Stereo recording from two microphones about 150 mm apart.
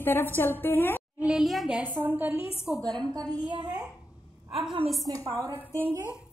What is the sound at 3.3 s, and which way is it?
Speech, 30° right (ahead or behind).